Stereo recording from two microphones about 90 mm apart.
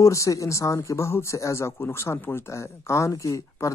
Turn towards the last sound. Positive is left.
turn(degrees=35)  # may be behind; listen again after turning